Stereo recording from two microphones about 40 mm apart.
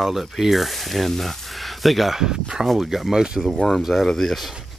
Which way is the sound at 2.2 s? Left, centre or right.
Centre.